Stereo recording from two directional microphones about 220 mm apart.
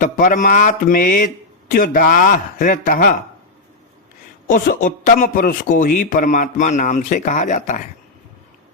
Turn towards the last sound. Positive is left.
turn(degrees=35)  # may be behind; listen again after turning